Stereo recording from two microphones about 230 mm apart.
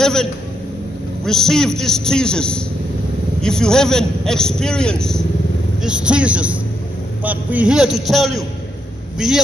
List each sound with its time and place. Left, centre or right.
0.0 s a man's voice: centre